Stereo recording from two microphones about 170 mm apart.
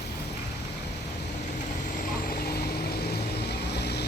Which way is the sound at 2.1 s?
60° left (ahead or behind).